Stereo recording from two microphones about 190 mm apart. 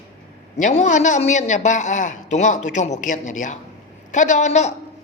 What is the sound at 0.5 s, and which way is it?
A man's voice, 40° left (ahead or behind).